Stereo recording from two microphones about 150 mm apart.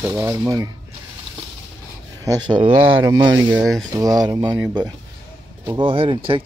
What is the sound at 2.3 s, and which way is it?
Speech, 30° right (ahead or behind).